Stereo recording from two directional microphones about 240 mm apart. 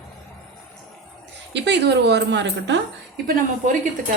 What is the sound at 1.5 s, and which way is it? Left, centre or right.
A woman's voice, right.